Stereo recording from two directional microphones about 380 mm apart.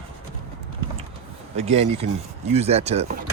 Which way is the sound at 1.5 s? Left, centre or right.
Centre.